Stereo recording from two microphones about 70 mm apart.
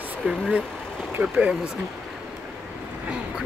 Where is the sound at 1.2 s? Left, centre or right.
Centre.